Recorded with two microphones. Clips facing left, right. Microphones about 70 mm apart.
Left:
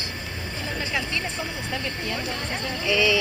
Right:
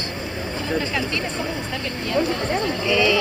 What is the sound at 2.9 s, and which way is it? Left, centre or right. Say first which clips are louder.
Speech: right 2 dB; centre.